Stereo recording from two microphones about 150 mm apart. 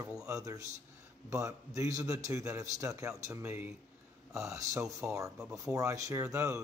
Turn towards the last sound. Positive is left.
turn(degrees=-20)  # may be behind; listen again after turning